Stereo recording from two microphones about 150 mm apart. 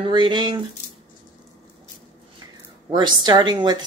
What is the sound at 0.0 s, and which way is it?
Speech, 30° right (ahead or behind).